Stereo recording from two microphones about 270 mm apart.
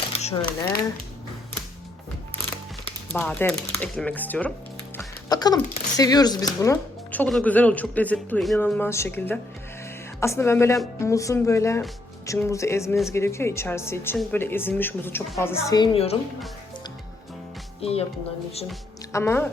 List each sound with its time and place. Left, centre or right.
0.1 s a sound: left
3.1 s speech: centre
17.7 s speech: left
19.1 s speech: centre